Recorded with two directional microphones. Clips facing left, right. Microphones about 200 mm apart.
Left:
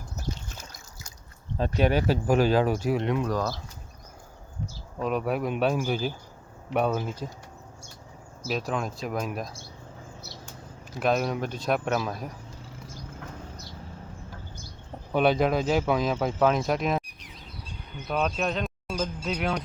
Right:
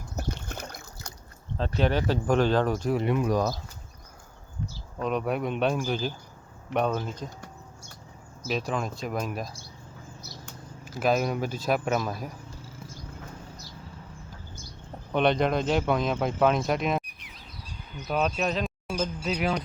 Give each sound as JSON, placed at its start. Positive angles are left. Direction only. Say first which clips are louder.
{"t": 0.2, "sound": "trickle", "louder": "right 3 dB", "side_deg": -60}
{"t": 1.5, "sound": "speech", "louder": "left 2 dB", "side_deg": 15}
{"t": 3.0, "sound": "speech", "louder": "right 1 dB", "side_deg": -5}
{"t": 3.2, "sound": "speech", "louder": "right 3 dB", "side_deg": -15}
{"t": 4.9, "sound": "speech", "louder": "left 1 dB", "side_deg": 5}
{"t": 8.4, "sound": "speech", "louder": "even", "side_deg": 0}
{"t": 10.9, "sound": "speech", "louder": "even", "side_deg": -5}
{"t": 15.1, "sound": "speech", "louder": "left 1 dB", "side_deg": 5}
{"t": 18.1, "sound": "speech", "louder": "right 1 dB", "side_deg": 0}